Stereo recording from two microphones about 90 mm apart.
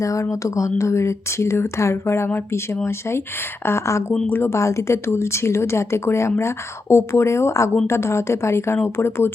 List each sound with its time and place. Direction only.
0.0 s speech: 35° left (ahead or behind)
3.7 s speech: 30° left (ahead or behind)